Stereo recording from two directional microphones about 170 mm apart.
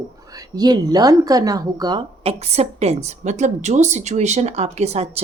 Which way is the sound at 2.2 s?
40° right (ahead or behind).